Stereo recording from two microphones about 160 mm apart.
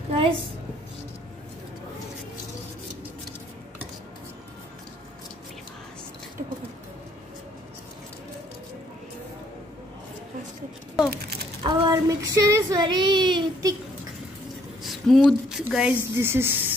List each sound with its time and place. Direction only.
0.1 s a sound: 35° right (ahead or behind)
11.6 s child singing: 25° right (ahead or behind)
14.8 s a woman's voice: centre (ahead or behind)
16.2 s speech: 15° right (ahead or behind)